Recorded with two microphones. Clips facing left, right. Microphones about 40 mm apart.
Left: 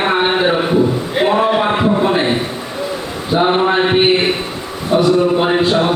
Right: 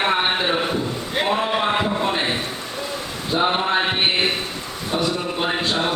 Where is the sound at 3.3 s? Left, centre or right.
Centre.